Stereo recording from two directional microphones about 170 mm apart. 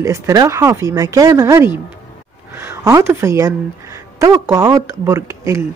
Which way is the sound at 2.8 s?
15° right (ahead or behind).